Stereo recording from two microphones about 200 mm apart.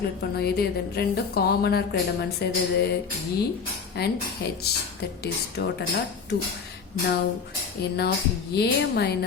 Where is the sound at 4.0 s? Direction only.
55° left (ahead or behind).